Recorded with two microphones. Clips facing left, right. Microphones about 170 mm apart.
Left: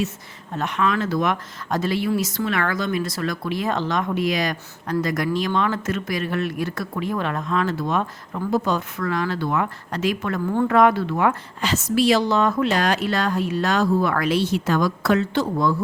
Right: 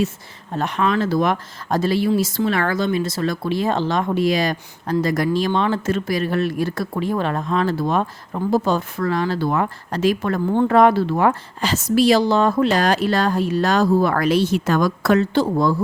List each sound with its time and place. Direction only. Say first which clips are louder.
0.5 s speech: right 3 dB; 35° right (ahead or behind)
15.4 s speech: right 3 dB; 35° right (ahead or behind)